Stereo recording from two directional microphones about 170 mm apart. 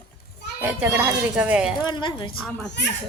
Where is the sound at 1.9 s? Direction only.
25° left (ahead or behind).